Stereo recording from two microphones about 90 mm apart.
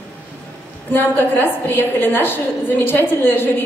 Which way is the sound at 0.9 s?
25° left (ahead or behind).